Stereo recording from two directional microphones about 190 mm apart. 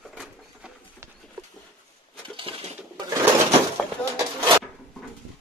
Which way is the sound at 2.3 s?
30° right (ahead or behind).